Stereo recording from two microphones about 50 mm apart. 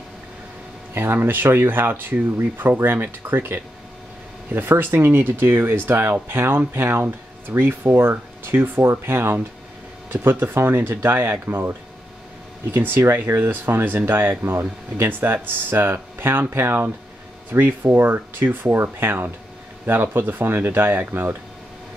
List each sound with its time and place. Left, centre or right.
0.9 s speech: right
12.7 s speech: right